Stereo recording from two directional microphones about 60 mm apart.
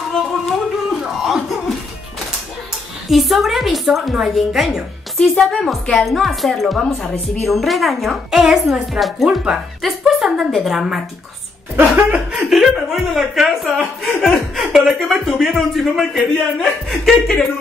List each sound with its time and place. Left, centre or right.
0.3 s a sound: centre
3.1 s speech: centre
11.8 s speech: centre
12.4 s speech: centre
14.5 s chuckle: centre
15.0 s speech: centre